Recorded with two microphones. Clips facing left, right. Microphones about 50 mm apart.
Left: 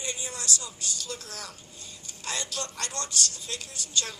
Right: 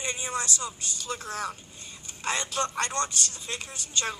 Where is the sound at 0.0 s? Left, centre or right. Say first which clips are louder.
Right 5 dB; right.